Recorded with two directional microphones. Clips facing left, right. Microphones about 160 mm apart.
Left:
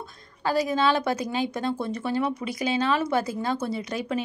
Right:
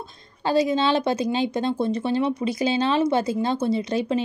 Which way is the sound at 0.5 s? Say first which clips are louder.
Right 3 dB; 25° right (ahead or behind).